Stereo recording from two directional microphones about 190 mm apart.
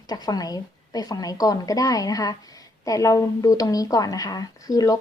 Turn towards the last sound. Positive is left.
turn(degrees=20)  # may be behind; listen again after turning